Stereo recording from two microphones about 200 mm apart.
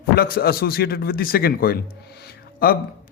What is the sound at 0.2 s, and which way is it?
A man's voice, 50° left (ahead or behind).